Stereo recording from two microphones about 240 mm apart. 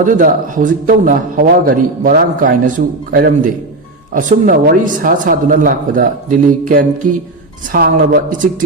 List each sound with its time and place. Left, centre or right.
0.0 s a man's voice: right